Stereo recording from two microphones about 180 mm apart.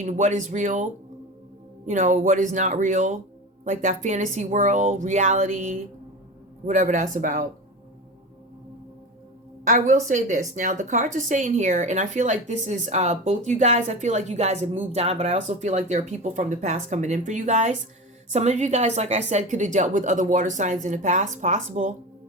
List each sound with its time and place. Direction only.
0.0 s speech: 40° right (ahead or behind)
1.9 s speech: 45° right (ahead or behind)
9.6 s speech: 45° right (ahead or behind)